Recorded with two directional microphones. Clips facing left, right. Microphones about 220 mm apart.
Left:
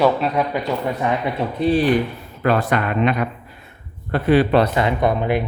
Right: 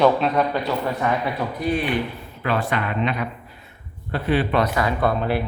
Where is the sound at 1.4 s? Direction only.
25° left (ahead or behind).